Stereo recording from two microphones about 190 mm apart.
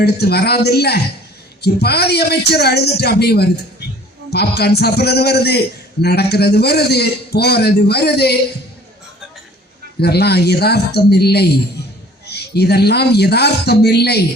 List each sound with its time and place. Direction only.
0.0 s a man's voice: 55° left (ahead or behind)
10.0 s a man's voice: 55° left (ahead or behind)